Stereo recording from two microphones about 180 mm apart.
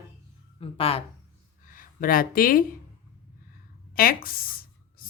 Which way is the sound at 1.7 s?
50° left (ahead or behind).